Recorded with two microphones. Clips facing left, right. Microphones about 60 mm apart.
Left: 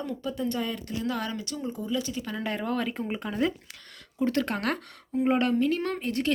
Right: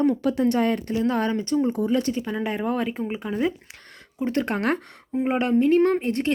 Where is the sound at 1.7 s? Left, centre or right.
Right.